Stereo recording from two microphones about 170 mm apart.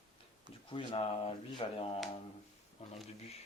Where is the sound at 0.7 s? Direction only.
35° left (ahead or behind).